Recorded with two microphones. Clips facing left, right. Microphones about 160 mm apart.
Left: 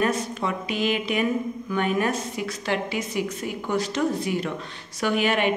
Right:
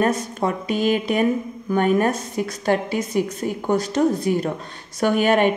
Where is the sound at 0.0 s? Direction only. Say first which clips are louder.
Right 4 dB; 45° right (ahead or behind).